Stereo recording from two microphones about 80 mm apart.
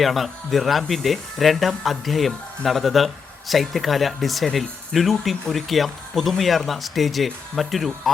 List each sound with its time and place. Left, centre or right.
0.0 s speech: centre